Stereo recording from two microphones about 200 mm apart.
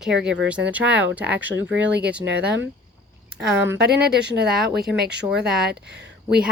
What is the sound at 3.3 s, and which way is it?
Speech, 10° right (ahead or behind).